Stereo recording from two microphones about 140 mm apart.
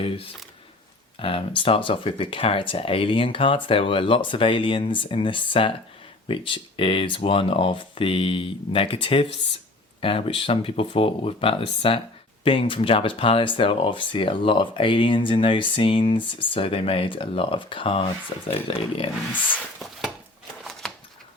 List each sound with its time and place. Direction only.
1.2 s speech: 40° left (ahead or behind)
20.8 s shuffling cards: 5° left (ahead or behind)